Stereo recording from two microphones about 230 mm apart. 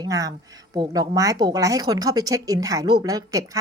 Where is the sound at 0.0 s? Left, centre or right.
Centre.